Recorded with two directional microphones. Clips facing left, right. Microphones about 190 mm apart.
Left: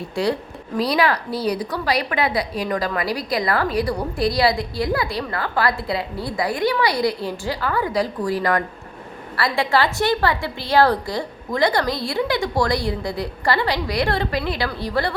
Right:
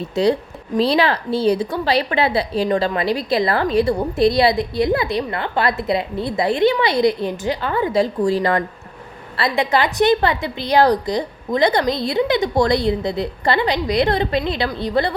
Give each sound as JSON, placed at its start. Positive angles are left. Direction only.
{"t": 0.2, "sound": "a woman's voice", "side_deg": -20}